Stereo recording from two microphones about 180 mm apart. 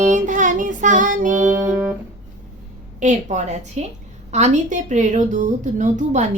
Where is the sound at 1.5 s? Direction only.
15° right (ahead or behind).